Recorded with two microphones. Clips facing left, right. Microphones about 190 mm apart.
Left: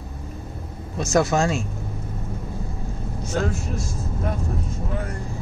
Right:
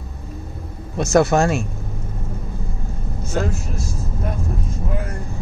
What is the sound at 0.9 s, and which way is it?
Speech, 65° right (ahead or behind).